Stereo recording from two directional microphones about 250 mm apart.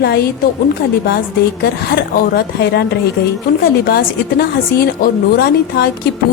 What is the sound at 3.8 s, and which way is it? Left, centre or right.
A woman's voice, left.